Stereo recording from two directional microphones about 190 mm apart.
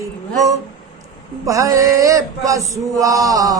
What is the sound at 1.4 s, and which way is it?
Male singing, 15° right (ahead or behind).